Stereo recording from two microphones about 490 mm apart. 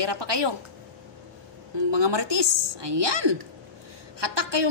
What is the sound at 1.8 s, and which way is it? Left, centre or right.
A woman's voice, right.